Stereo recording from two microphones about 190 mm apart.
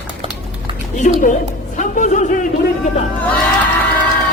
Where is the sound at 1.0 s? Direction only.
45° left (ahead or behind).